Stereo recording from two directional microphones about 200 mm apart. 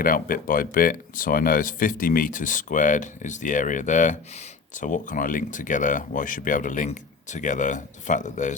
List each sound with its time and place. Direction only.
0.0 s speech: 45° left (ahead or behind)